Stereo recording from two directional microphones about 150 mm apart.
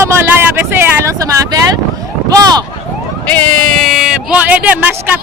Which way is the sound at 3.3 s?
Centre (ahead or behind).